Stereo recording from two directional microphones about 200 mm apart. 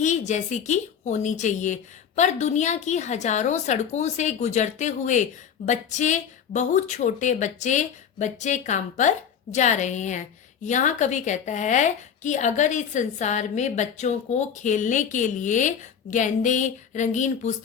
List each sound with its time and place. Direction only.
0.0 s a woman's voice: 35° left (ahead or behind)